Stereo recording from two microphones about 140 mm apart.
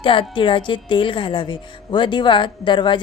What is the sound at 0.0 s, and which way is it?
A woman's voice, 40° left (ahead or behind).